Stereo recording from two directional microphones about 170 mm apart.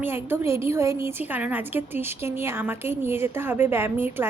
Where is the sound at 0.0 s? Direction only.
15° right (ahead or behind).